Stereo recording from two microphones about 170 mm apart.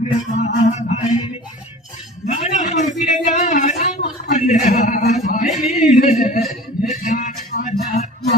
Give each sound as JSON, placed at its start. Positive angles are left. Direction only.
{"t": 0.0, "sound": "music", "side_deg": 40}
{"t": 2.2, "sound": "a sound", "side_deg": 45}
{"t": 5.7, "sound": "a man's voice", "side_deg": 45}
{"t": 7.0, "sound": "music", "side_deg": 50}